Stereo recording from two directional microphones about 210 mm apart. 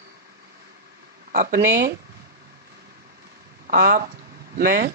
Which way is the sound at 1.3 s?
45° right (ahead or behind).